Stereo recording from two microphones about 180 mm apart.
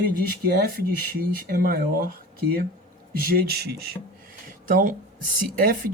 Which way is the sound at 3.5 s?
60° right (ahead or behind).